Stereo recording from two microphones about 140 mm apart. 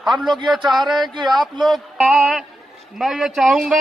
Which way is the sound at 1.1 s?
30° right (ahead or behind).